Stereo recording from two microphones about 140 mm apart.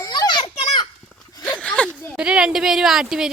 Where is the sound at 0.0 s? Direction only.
30° left (ahead or behind).